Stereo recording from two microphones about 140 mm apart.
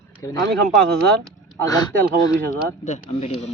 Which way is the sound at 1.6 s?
25° left (ahead or behind).